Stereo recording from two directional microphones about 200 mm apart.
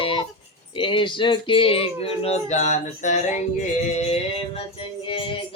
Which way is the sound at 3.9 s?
30° left (ahead or behind).